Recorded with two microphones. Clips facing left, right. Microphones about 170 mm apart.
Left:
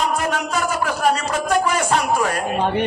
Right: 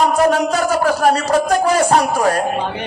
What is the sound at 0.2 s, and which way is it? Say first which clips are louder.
Speech: right 8 dB; 40° right (ahead or behind).